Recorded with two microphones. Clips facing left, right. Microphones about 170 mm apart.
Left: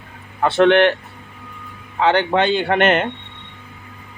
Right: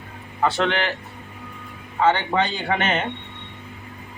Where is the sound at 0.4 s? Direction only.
60° left (ahead or behind).